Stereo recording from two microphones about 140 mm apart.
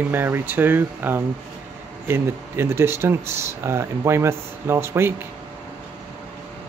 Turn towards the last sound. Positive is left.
turn(degrees=-15)  # may be behind; listen again after turning